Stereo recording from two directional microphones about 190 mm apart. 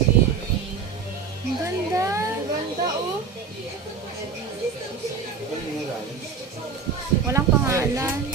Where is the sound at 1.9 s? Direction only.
15° right (ahead or behind).